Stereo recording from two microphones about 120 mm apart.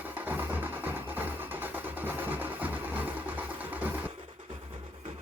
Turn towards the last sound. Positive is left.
turn(degrees=-15)  # may be behind; listen again after turning